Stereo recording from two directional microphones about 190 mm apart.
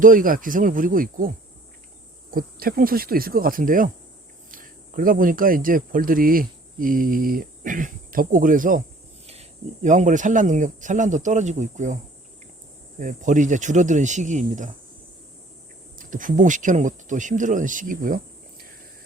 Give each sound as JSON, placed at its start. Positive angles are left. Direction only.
{"t": 0.0, "sound": "speech", "side_deg": -45}
{"t": 2.3, "sound": "speech", "side_deg": -50}
{"t": 9.2, "sound": "speech", "side_deg": -35}
{"t": 13.0, "sound": "speech", "side_deg": -40}
{"t": 16.0, "sound": "speech", "side_deg": -45}